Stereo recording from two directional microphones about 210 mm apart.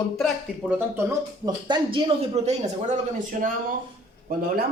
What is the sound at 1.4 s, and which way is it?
Speech, 20° right (ahead or behind).